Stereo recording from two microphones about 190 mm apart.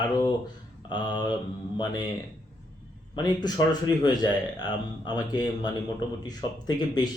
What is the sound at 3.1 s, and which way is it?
Speech, 20° left (ahead or behind).